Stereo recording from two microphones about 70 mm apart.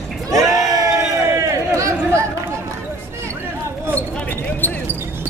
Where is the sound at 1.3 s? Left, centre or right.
Right.